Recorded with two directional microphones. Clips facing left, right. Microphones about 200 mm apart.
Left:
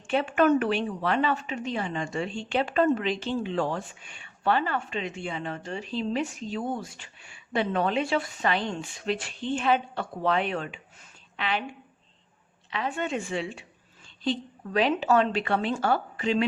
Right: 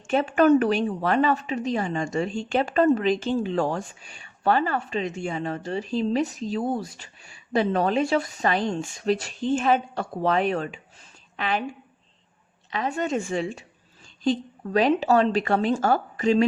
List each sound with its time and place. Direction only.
0.1 s a woman's voice: 40° right (ahead or behind)
12.7 s a woman's voice: 40° right (ahead or behind)